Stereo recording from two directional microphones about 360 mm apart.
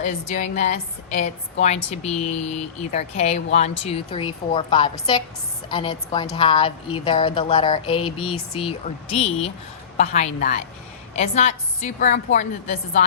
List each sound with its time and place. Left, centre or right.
0.0 s a woman's voice: centre